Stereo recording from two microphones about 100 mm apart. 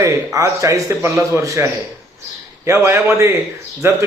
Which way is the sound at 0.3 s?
35° right (ahead or behind).